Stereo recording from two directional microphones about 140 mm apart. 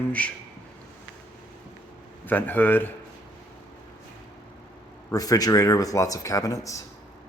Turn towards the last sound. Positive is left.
turn(degrees=25)  # may be behind; listen again after turning